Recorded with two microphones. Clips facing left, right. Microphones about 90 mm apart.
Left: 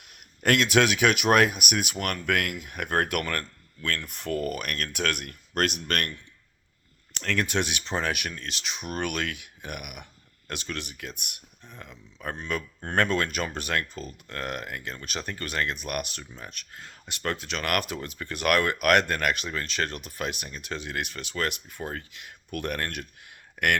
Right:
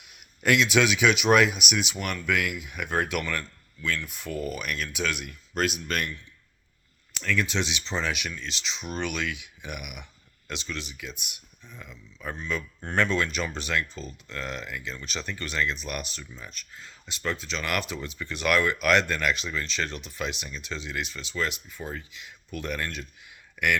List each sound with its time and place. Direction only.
0.0 s a man's voice: 50° left (ahead or behind)
7.2 s speech: 60° left (ahead or behind)